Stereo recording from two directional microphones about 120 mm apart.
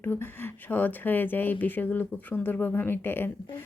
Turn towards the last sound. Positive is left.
turn(degrees=20)  # may be behind; listen again after turning